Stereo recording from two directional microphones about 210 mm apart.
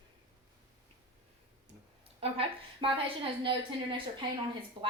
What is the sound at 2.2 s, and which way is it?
A woman's voice, 25° right (ahead or behind).